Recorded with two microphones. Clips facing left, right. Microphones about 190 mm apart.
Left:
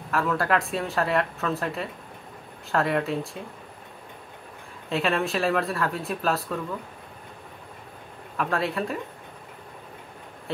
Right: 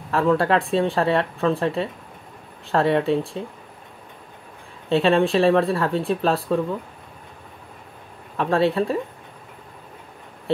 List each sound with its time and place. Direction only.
0.1 s speech: 30° right (ahead or behind)
4.8 s speech: 30° right (ahead or behind)
8.4 s speech: 30° right (ahead or behind)